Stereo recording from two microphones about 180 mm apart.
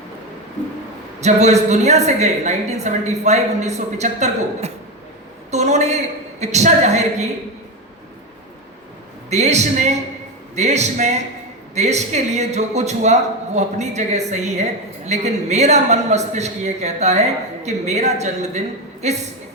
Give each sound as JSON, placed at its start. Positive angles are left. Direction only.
{"t": 1.2, "sound": "speech", "side_deg": -40}
{"t": 9.3, "sound": "speech", "side_deg": -40}